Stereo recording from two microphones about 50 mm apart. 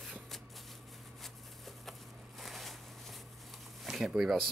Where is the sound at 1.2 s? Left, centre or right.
Centre.